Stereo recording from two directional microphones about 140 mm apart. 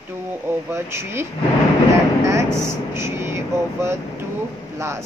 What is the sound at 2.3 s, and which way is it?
Air conditioning, 20° right (ahead or behind).